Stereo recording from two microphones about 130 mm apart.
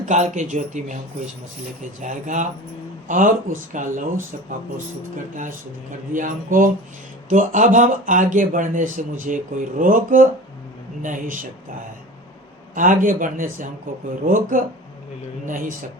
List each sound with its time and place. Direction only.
0.0 s speech: 65° right (ahead or behind)
2.0 s speech: 75° right (ahead or behind)
3.1 s speech: 90° right
6.1 s a man's voice: 90° right
7.3 s speech: 75° right (ahead or behind)
12.7 s a man's voice: 90° right